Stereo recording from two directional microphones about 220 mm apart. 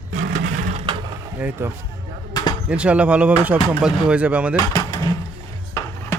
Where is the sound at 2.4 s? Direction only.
15° left (ahead or behind).